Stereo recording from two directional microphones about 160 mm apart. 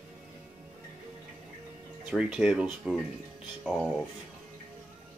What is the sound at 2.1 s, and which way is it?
Speech, 5° right (ahead or behind).